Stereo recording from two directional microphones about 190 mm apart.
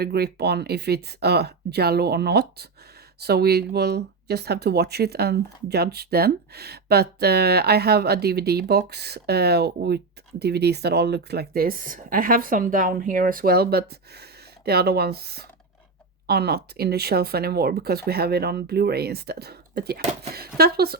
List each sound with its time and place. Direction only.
0.0 s speech: 55° right (ahead or behind)